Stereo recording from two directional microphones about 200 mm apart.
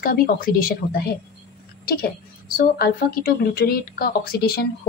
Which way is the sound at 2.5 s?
50° left (ahead or behind).